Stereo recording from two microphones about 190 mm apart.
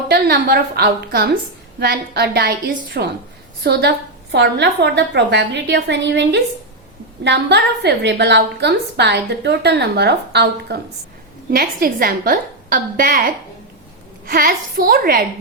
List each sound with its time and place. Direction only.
0.1 s a woman's voice: 55° right (ahead or behind)